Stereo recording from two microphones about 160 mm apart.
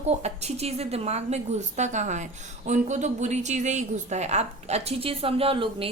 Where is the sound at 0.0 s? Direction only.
45° right (ahead or behind).